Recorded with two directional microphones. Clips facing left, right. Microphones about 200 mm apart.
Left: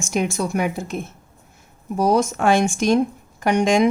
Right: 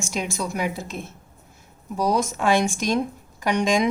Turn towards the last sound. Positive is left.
turn(degrees=50)  # may be behind; listen again after turning